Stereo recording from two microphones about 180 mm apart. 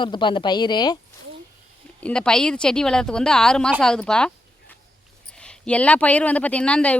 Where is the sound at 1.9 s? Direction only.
5° left (ahead or behind).